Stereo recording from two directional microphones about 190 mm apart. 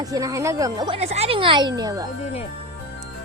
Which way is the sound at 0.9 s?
35° right (ahead or behind).